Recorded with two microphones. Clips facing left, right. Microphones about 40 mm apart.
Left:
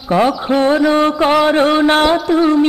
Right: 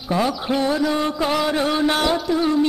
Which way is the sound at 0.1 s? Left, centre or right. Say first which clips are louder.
Left 7 dB; left.